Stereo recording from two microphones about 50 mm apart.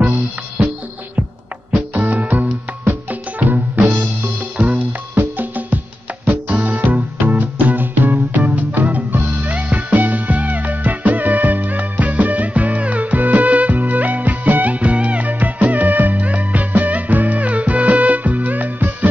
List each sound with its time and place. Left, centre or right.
1.7 s music: right
5.1 s music: right